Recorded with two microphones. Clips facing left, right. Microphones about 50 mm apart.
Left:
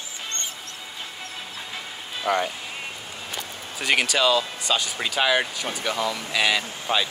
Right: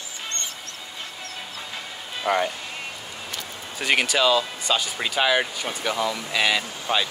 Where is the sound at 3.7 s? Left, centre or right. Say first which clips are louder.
Right 1 dB; centre.